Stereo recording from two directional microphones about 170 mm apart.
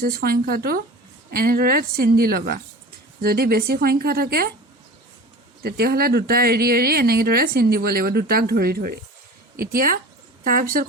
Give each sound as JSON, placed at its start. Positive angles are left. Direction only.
{"t": 0.0, "sound": "speech", "side_deg": -60}
{"t": 5.6, "sound": "speech", "side_deg": -65}